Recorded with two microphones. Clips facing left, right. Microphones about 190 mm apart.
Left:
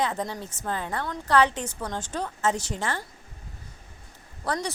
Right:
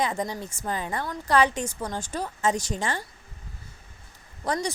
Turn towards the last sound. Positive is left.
turn(degrees=-15)  # may be behind; listen again after turning